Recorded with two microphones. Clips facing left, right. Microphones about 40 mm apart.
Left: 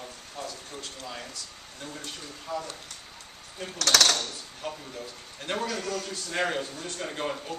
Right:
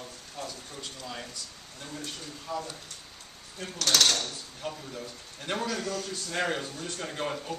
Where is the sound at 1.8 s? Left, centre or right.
Centre.